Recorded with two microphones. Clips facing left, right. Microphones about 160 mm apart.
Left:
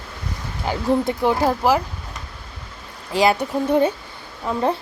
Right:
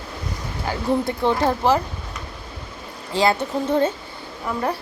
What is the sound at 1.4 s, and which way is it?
Speech, 5° left (ahead or behind).